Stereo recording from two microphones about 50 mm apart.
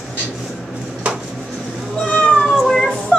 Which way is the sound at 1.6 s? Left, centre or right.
Centre.